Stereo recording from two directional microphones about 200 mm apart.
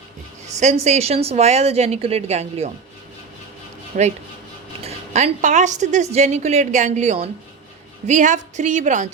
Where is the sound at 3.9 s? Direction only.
40° right (ahead or behind).